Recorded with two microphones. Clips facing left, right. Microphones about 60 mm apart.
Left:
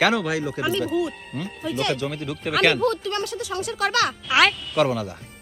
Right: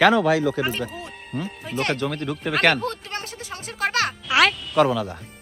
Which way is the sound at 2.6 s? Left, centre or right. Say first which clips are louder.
Even; right.